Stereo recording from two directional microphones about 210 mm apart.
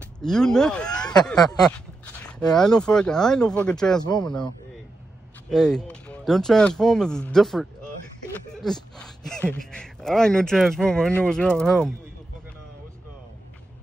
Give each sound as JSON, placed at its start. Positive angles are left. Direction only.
{"t": 0.2, "sound": "speech", "side_deg": 5}
{"t": 1.3, "sound": "speech", "side_deg": 20}
{"t": 2.5, "sound": "speech", "side_deg": 5}
{"t": 4.0, "sound": "speech", "side_deg": 20}
{"t": 5.5, "sound": "speech", "side_deg": 5}
{"t": 8.9, "sound": "speech", "side_deg": 5}